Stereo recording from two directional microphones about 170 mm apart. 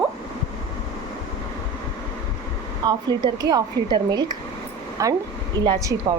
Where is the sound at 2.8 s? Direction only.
25° right (ahead or behind).